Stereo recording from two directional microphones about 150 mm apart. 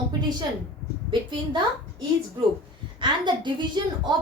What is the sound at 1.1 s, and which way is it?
Speech, 30° right (ahead or behind).